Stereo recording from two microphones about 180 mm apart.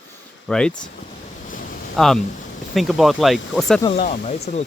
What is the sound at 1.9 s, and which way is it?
Speech, centre (ahead or behind).